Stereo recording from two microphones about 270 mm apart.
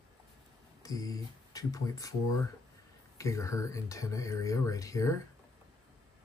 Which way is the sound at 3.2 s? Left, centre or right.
Centre.